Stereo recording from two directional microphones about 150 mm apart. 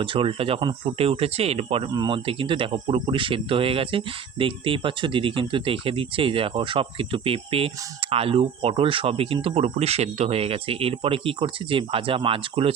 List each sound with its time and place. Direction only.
0.0 s speech: 35° right (ahead or behind)